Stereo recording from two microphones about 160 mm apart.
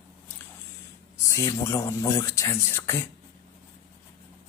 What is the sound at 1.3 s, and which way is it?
Speech, 20° left (ahead or behind).